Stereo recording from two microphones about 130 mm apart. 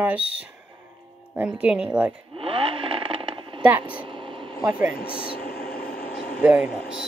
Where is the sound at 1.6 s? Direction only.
10° right (ahead or behind).